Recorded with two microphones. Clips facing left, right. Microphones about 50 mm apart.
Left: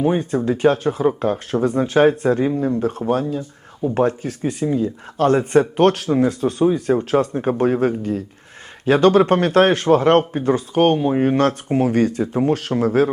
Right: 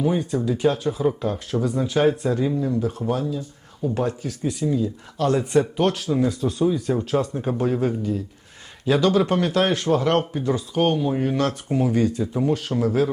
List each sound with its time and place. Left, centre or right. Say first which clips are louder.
0.0 s speech: left 4 dB; left